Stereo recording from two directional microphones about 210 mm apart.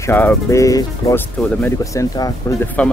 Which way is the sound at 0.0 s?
10° left (ahead or behind).